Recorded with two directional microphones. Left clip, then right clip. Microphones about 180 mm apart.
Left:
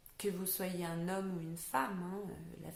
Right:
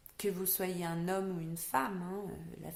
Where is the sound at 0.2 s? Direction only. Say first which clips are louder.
Right 3 dB; 45° right (ahead or behind).